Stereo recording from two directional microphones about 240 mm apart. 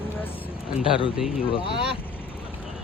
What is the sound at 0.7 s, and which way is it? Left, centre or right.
Speech, left.